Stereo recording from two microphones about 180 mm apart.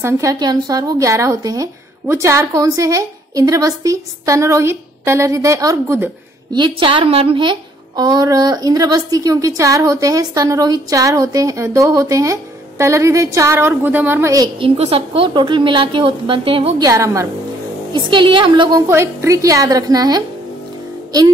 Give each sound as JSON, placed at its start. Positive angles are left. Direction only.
{"t": 0.0, "sound": "a woman's voice", "side_deg": -20}
{"t": 6.5, "sound": "a woman's voice", "side_deg": -25}
{"t": 14.8, "sound": "a woman's voice", "side_deg": -30}